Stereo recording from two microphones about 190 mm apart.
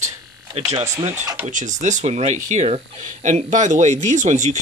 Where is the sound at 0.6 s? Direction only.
35° right (ahead or behind).